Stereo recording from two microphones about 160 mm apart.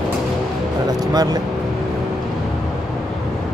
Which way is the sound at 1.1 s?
25° right (ahead or behind).